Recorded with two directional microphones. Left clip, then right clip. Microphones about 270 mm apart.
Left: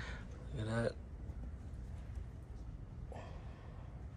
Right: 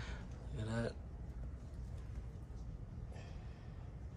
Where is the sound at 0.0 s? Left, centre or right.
Centre.